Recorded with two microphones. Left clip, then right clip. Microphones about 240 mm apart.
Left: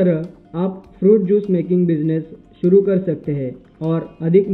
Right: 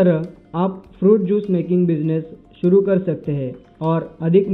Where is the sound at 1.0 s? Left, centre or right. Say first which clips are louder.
Left 2 dB; centre.